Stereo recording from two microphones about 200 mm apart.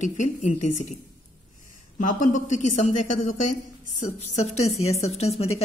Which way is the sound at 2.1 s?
35° left (ahead or behind).